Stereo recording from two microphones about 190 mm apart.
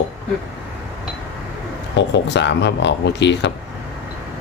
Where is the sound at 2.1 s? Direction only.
65° left (ahead or behind).